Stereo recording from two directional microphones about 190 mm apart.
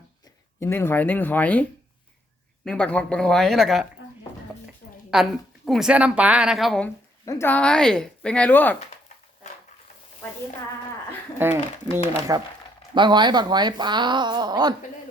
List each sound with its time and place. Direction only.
0.6 s speech: 10° left (ahead or behind)
2.6 s a woman's voice: 5° left (ahead or behind)
5.1 s a woman's voice: centre (ahead or behind)
11.3 s speech: 10° right (ahead or behind)